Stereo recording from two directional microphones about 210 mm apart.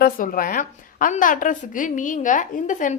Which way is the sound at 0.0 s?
40° left (ahead or behind).